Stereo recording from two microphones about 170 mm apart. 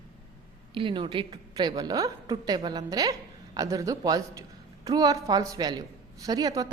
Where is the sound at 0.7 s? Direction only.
30° right (ahead or behind).